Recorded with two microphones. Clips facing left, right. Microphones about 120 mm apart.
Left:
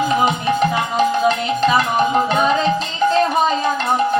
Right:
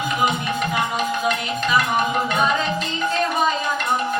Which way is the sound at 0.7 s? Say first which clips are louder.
Left 5 dB; 30° left (ahead or behind).